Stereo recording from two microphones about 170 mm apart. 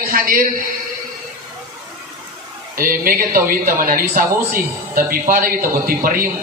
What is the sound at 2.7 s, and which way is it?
A man's voice, 55° right (ahead or behind).